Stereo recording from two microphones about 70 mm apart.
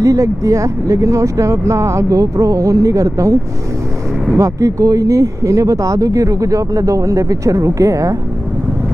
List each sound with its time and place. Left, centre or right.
0.0 s speech: right
4.4 s speech: right